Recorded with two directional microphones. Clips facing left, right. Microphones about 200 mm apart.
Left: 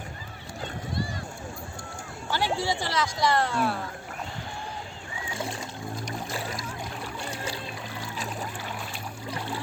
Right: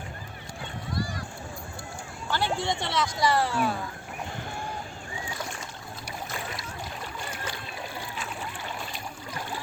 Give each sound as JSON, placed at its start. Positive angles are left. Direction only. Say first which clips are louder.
{"t": 2.3, "sound": "speech", "louder": "left 1 dB", "side_deg": 10}
{"t": 7.3, "sound": "boat", "louder": "left 3 dB", "side_deg": 30}